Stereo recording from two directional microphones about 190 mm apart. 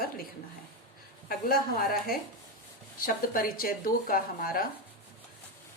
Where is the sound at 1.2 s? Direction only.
50° left (ahead or behind).